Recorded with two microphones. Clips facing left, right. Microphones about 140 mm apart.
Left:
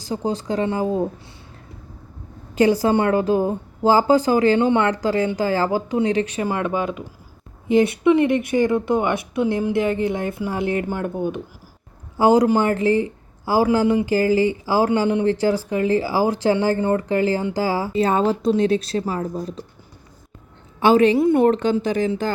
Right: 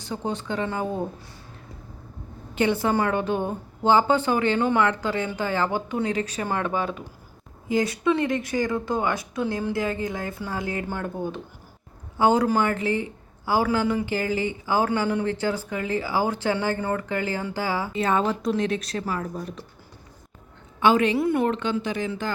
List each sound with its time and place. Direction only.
0.0 s a woman's voice: 35° left (ahead or behind)
2.6 s a woman's voice: 35° left (ahead or behind)
4.9 s a woman's voice: 35° left (ahead or behind)
6.4 s speech: 10° left (ahead or behind)
12.1 s a woman's voice: 35° left (ahead or behind)
14.8 s a woman's voice: 20° left (ahead or behind)
20.7 s a woman's voice: 35° left (ahead or behind)
21.2 s speech: 25° left (ahead or behind)
21.4 s a woman's voice: 40° left (ahead or behind)